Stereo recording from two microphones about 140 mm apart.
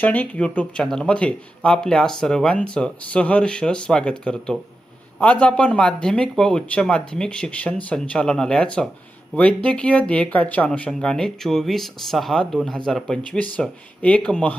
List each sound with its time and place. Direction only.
0.0 s speech: 10° left (ahead or behind)